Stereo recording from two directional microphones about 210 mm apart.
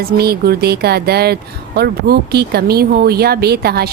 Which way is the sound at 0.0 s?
50° right (ahead or behind).